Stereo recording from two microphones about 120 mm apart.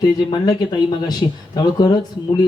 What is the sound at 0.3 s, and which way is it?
A man's voice, 40° left (ahead or behind).